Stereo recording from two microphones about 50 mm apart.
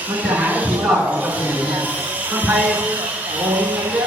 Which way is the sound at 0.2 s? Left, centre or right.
Right.